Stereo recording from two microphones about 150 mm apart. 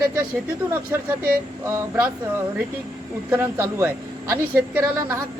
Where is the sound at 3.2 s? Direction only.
15° right (ahead or behind).